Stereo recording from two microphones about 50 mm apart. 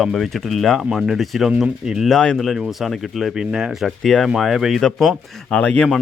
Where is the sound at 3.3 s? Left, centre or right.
Centre.